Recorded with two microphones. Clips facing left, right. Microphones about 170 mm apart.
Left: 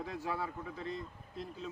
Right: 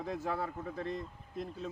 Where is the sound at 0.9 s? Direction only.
50° right (ahead or behind).